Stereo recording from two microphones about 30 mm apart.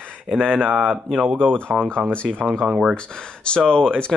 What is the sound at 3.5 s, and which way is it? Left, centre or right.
Speech, left.